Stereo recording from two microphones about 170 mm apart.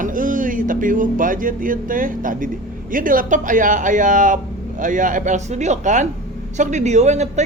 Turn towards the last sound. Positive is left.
turn(degrees=-40)  # may be behind; listen again after turning